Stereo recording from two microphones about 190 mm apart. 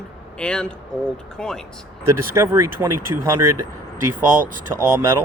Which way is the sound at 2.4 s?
15° right (ahead or behind).